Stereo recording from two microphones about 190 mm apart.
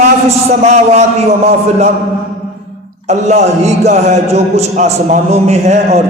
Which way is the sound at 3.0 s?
35° right (ahead or behind).